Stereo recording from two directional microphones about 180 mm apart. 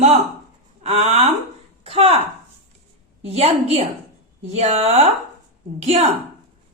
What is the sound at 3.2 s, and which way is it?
A woman's voice, 35° right (ahead or behind).